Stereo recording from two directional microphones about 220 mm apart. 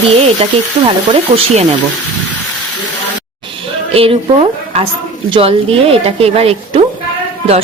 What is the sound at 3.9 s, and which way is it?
A woman's voice, 25° right (ahead or behind).